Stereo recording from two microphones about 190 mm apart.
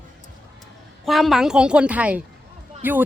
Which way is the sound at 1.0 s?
Centre (ahead or behind).